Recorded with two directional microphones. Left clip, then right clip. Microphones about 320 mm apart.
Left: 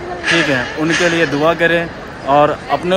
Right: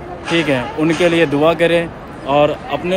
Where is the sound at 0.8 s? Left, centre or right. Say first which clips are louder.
Right 1 dB; right.